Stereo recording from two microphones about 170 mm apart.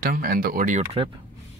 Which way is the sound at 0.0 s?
60° right (ahead or behind).